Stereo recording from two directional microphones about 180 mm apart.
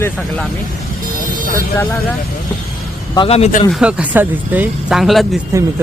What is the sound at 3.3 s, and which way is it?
Speech, 35° left (ahead or behind).